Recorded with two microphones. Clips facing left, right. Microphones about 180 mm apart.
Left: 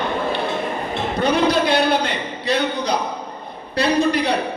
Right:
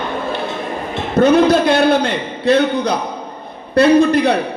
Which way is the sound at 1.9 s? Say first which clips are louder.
Right 5 dB; 50° right (ahead or behind).